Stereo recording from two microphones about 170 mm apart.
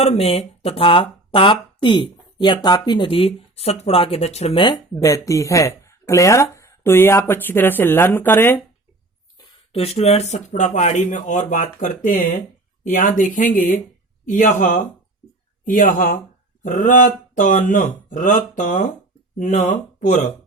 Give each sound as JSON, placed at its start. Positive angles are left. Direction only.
{"t": 0.0, "sound": "speech", "side_deg": 35}
{"t": 9.7, "sound": "speech", "side_deg": 40}